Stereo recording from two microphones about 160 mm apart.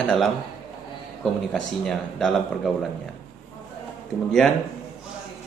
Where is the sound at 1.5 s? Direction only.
5° left (ahead or behind).